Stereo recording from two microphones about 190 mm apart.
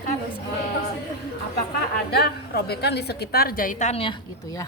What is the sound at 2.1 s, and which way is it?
A woman's voice, 55° left (ahead or behind).